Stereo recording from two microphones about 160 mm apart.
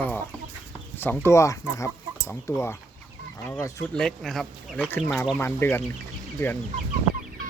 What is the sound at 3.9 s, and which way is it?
Speech, 5° left (ahead or behind).